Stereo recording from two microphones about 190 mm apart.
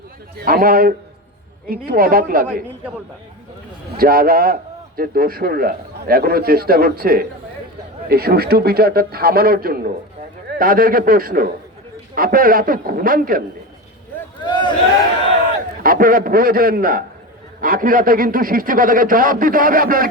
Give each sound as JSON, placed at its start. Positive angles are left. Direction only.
{"t": 0.4, "sound": "a man's voice", "side_deg": -50}
{"t": 3.9, "sound": "a man's voice", "side_deg": -50}
{"t": 14.4, "sound": "a sound", "side_deg": 25}
{"t": 15.8, "sound": "a man's voice", "side_deg": -45}